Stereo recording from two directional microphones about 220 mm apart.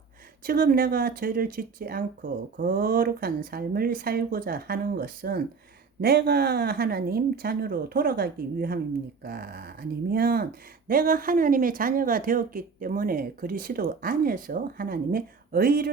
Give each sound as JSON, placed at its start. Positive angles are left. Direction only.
{"t": 0.4, "sound": "speech", "side_deg": -40}